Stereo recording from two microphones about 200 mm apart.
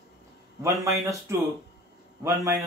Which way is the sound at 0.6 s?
15° right (ahead or behind).